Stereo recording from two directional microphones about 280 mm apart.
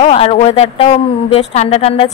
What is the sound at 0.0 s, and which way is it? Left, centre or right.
A woman's voice, left.